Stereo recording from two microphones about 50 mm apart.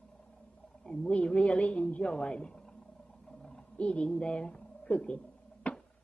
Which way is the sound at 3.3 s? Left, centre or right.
Centre.